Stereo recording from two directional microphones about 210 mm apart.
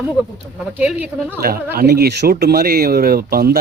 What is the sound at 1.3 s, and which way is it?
Speech, 45° right (ahead or behind).